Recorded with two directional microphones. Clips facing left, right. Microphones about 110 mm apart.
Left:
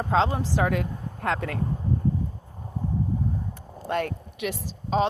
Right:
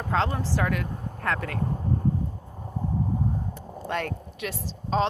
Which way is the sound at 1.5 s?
25° right (ahead or behind).